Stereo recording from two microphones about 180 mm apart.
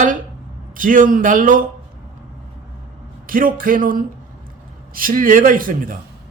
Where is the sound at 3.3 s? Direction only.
50° right (ahead or behind).